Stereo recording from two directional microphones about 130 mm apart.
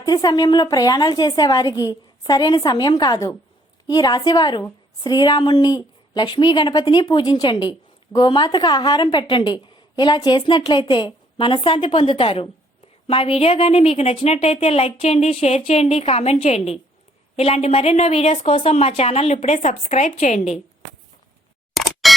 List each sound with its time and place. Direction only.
0.0 s a woman's voice: 30° left (ahead or behind); by 20.6 s 65° left (ahead or behind)
21.8 s camera: centre (ahead or behind)